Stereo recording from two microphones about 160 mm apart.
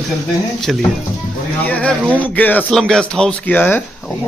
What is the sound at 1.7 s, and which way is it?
Speech, 10° left (ahead or behind).